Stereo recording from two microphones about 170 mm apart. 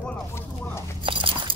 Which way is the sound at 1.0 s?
30° right (ahead or behind).